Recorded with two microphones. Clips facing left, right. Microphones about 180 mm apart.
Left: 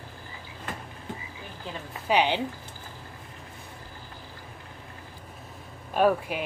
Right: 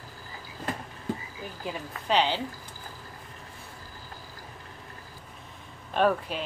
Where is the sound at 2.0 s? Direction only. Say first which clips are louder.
Left 2 dB; 15° left (ahead or behind).